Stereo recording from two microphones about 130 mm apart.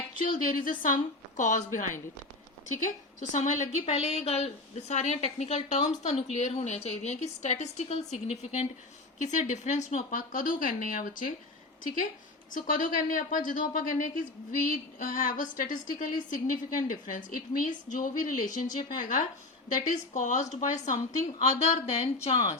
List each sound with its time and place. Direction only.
0.2 s speech: 90° left
1.4 s a woman's voice: 75° left (ahead or behind); by 11.3 s 90° left
12.5 s speech: 90° left
19.6 s a woman's voice: 75° left (ahead or behind); by 22.4 s 55° left (ahead or behind)